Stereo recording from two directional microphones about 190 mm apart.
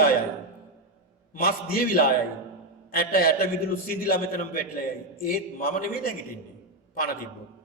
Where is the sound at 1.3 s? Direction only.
50° left (ahead or behind).